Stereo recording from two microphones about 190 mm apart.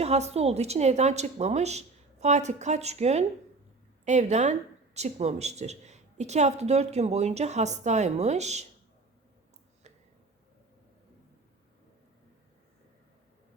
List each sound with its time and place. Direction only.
0.0 s a woman's voice: 35° right (ahead or behind)